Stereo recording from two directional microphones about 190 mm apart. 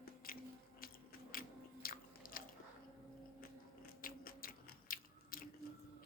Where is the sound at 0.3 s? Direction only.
50° left (ahead or behind).